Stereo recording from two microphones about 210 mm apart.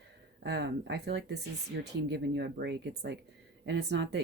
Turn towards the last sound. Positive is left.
turn(degrees=-55)  # may be behind; listen again after turning